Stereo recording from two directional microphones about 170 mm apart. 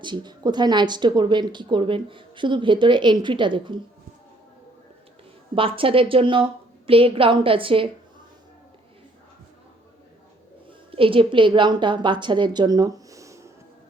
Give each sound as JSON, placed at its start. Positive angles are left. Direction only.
{"t": 0.0, "sound": "speech", "side_deg": -25}
{"t": 5.5, "sound": "a woman's voice", "side_deg": -30}
{"t": 10.9, "sound": "a woman's voice", "side_deg": -30}